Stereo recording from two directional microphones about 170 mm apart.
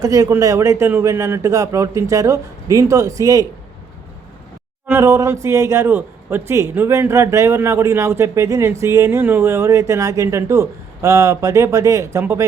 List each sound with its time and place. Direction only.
0.0 s speech: 20° right (ahead or behind)
4.9 s a man's voice: 15° right (ahead or behind)